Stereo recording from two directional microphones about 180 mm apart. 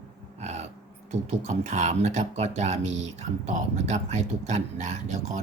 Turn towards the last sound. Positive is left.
turn(degrees=-40)  # may be behind; listen again after turning